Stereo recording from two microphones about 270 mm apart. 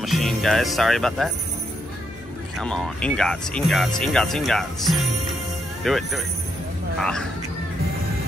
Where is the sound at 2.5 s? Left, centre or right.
Centre.